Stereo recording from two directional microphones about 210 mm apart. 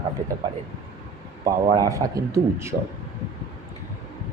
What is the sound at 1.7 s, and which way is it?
Speech, 15° right (ahead or behind).